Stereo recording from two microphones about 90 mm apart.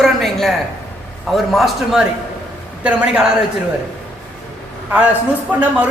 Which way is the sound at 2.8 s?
15° right (ahead or behind).